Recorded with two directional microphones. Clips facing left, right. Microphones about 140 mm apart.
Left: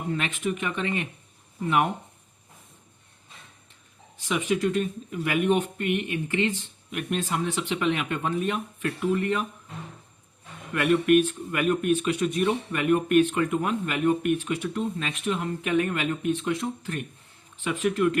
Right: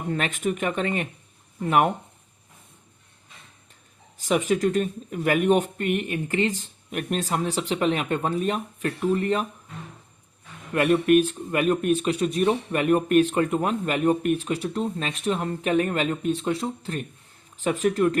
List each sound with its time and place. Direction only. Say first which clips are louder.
0.1 s speech: right 3 dB; 45° right (ahead or behind)
4.2 s speech: right 3 dB; 40° right (ahead or behind)
10.8 s speech: right 2 dB; 35° right (ahead or behind)